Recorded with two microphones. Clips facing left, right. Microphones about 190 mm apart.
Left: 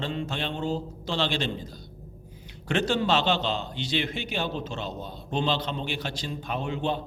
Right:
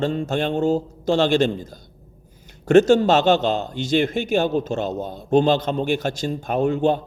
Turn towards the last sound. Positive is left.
turn(degrees=-45)  # may be behind; listen again after turning